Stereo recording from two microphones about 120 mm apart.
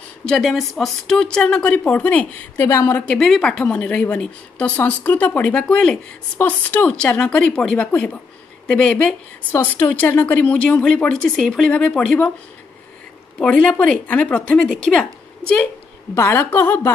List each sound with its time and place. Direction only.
0.3 s a woman's voice: centre (ahead or behind); by 3.0 s 20° left (ahead or behind)
3.1 s a woman's voice: 5° left (ahead or behind)
13.4 s a woman's voice: 10° left (ahead or behind)